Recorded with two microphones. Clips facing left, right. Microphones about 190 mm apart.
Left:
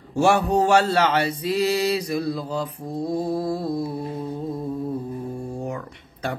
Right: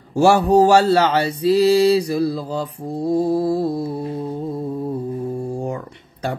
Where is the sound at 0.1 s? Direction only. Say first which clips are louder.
Right 5 dB; 30° right (ahead or behind).